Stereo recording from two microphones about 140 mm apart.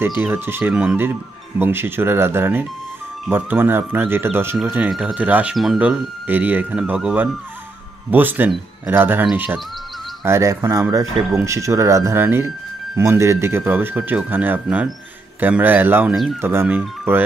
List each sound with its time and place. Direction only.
0.2 s speech: 15° right (ahead or behind)